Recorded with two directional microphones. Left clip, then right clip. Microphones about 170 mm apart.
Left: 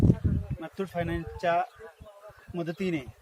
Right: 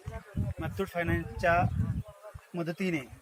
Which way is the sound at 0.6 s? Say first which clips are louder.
Right 1 dB; 25° right (ahead or behind).